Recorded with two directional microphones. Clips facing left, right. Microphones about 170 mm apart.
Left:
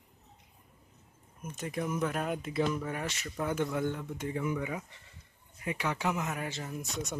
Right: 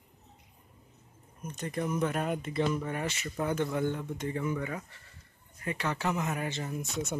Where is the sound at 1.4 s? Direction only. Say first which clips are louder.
Right 1 dB; 5° left (ahead or behind).